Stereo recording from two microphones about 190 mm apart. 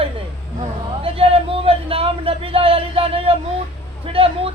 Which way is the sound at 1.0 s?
30° right (ahead or behind).